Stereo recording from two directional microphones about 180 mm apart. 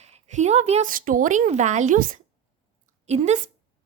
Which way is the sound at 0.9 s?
50° right (ahead or behind).